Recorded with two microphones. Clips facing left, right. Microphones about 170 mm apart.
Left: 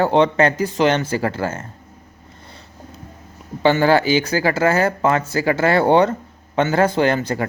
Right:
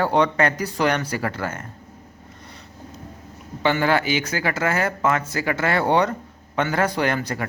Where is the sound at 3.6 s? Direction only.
30° left (ahead or behind).